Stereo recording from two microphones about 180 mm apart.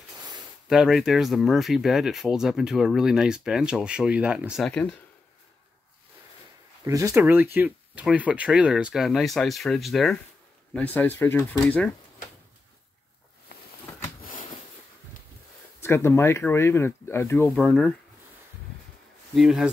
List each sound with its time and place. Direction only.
0.7 s speech: centre (ahead or behind)
6.8 s speech: 20° right (ahead or behind); by 11.9 s 10° left (ahead or behind)
13.5 s a sound: 60° left (ahead or behind)
15.8 s speech: 15° left (ahead or behind)
19.3 s speech: centre (ahead or behind)